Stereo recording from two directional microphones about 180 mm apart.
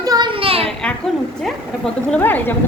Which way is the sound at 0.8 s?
5° left (ahead or behind).